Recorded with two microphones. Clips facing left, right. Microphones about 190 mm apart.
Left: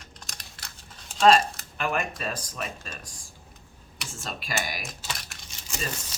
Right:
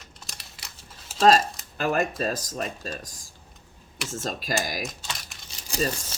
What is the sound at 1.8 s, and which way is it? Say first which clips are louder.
Speech: right 4 dB; 40° right (ahead or behind).